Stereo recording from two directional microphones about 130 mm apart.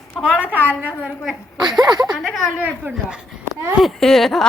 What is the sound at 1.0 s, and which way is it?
Speech, 5° right (ahead or behind).